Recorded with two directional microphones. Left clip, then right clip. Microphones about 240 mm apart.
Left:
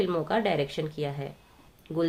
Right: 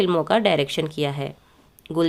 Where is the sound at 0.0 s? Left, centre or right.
Right.